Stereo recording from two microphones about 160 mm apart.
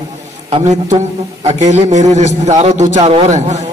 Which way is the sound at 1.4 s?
45° right (ahead or behind).